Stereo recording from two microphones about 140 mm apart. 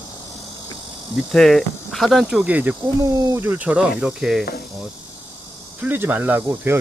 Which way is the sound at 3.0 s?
25° right (ahead or behind).